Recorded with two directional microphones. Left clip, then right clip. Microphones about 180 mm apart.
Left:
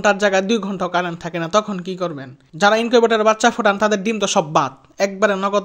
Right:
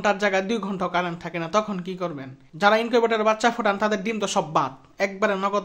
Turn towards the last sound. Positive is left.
turn(degrees=30)  # may be behind; listen again after turning